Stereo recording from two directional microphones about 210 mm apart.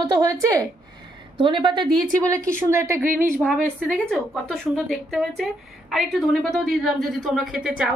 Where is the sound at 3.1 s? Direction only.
40° right (ahead or behind).